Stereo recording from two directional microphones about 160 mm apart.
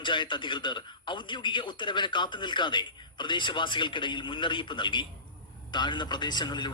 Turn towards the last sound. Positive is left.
turn(degrees=25)  # may be behind; listen again after turning